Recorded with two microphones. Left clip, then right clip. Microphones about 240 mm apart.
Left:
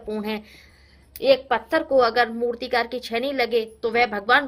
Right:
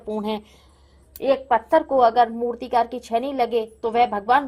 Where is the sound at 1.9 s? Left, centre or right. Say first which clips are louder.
Even; centre.